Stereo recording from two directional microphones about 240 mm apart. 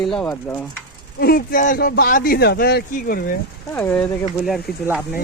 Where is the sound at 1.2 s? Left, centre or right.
Left.